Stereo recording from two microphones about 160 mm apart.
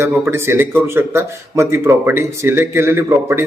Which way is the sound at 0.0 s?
15° right (ahead or behind).